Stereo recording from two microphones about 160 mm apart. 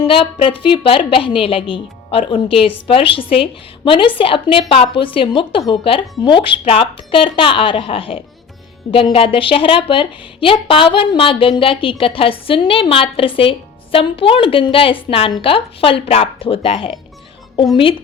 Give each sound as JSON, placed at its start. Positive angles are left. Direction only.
{"t": 0.0, "sound": "a woman's voice", "side_deg": 35}